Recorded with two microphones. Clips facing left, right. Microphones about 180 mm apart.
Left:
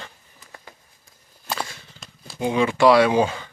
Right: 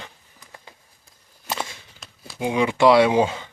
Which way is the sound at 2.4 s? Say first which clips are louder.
Even; 15° right (ahead or behind).